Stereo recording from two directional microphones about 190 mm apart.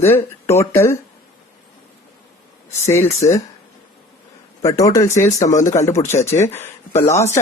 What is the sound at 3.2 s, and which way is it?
Speech, 15° left (ahead or behind).